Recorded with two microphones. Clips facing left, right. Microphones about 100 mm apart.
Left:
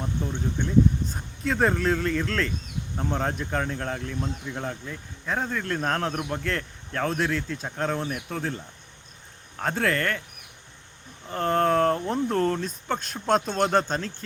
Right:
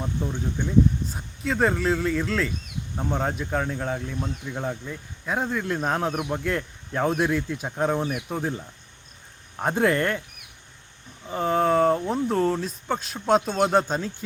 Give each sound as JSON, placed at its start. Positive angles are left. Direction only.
{"t": 0.0, "sound": "speech", "side_deg": -5}
{"t": 11.3, "sound": "speech", "side_deg": -5}